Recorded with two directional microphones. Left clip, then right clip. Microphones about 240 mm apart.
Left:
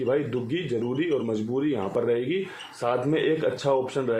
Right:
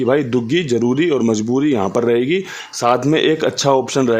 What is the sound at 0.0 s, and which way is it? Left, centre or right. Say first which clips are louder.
Speech: right 9 dB; right.